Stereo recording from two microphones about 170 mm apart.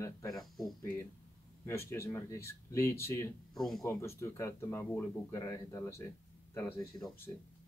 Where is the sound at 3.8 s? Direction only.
15° left (ahead or behind).